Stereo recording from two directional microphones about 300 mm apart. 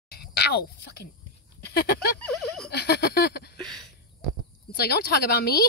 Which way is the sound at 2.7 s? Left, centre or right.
Left.